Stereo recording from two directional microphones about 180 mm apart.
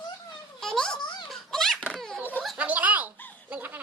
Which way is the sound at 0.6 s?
5° left (ahead or behind).